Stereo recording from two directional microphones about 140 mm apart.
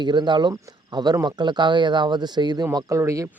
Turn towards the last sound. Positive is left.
turn(degrees=-20)  # may be behind; listen again after turning